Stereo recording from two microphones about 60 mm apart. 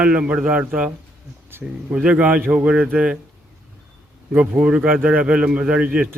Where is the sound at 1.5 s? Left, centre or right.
Right.